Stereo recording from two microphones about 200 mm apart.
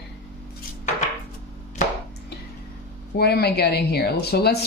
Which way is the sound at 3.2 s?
55° left (ahead or behind).